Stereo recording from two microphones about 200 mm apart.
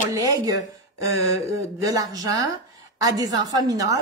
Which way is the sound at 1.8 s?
20° right (ahead or behind).